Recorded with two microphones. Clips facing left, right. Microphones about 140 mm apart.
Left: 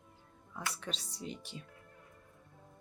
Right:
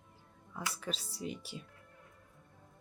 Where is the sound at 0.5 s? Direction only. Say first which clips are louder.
Right 1 dB; 5° right (ahead or behind).